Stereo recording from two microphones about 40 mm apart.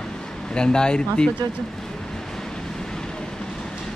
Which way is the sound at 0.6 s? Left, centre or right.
Centre.